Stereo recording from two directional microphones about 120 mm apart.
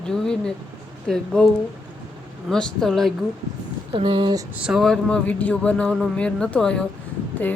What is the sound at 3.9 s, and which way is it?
Speech, 45° right (ahead or behind).